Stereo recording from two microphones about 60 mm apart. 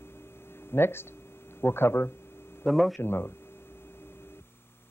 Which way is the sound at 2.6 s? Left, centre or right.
Centre.